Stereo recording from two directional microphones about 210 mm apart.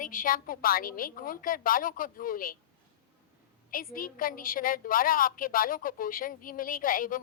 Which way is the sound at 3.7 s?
40° left (ahead or behind).